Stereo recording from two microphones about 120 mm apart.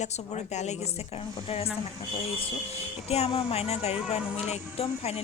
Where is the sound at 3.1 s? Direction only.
55° left (ahead or behind).